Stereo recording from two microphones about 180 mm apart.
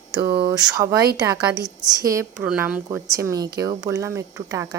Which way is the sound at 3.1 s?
15° right (ahead or behind).